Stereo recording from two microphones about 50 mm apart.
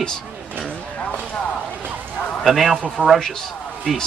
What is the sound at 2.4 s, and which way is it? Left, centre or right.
Speech, centre.